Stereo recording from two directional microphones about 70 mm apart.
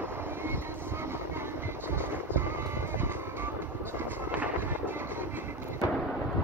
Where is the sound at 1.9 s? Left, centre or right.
Right.